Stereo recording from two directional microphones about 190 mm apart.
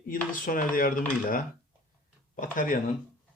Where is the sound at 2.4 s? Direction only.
45° left (ahead or behind).